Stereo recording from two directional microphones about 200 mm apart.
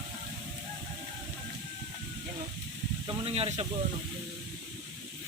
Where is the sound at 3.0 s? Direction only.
30° right (ahead or behind).